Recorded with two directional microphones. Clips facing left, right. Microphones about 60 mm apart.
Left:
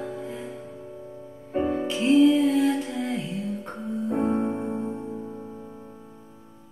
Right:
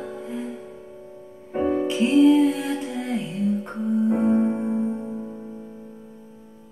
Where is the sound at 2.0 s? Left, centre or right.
Right.